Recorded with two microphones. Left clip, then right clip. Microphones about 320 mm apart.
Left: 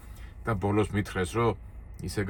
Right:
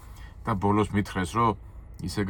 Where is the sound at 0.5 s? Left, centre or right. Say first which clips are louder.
Right 3 dB; centre.